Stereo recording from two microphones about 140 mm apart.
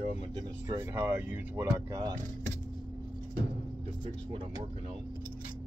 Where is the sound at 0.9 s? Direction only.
10° right (ahead or behind).